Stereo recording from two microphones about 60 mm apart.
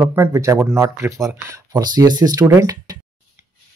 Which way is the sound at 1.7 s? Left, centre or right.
Right.